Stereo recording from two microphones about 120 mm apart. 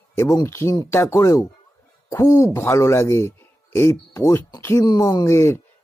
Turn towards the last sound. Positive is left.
turn(degrees=25)  # may be behind; listen again after turning